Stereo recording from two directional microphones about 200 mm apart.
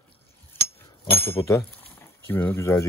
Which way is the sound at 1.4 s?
15° left (ahead or behind).